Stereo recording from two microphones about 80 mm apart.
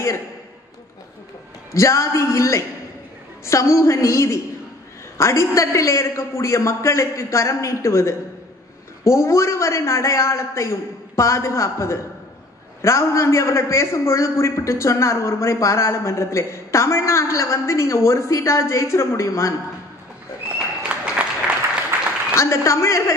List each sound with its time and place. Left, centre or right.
1.7 s a man's voice: left
20.5 s applause: centre
22.3 s a man's voice: left